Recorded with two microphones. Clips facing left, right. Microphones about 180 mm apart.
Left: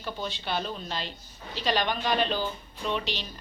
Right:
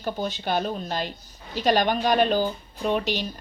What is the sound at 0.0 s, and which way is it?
Speech, 45° right (ahead or behind).